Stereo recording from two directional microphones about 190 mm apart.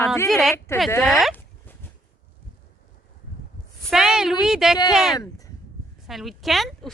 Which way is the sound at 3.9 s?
Centre (ahead or behind).